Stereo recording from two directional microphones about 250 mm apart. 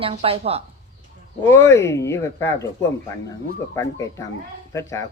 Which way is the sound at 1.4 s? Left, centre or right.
Centre.